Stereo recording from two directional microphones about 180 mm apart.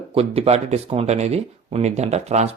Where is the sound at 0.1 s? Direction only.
35° right (ahead or behind).